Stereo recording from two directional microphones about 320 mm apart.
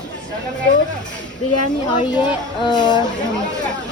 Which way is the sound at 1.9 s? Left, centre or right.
Centre.